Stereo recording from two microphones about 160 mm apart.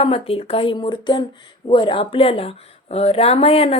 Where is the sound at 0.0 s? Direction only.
35° left (ahead or behind).